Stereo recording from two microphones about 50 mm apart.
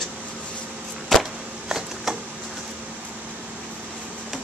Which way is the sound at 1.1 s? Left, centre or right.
Centre.